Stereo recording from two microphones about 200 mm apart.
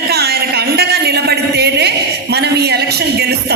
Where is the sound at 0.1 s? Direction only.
50° right (ahead or behind).